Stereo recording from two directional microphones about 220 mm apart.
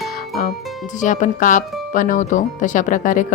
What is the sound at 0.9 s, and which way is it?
Speech, 35° left (ahead or behind).